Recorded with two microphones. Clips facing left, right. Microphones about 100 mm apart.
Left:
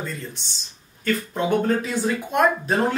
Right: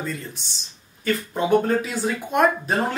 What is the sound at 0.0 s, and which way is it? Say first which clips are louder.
Speech: right 1 dB; centre (ahead or behind).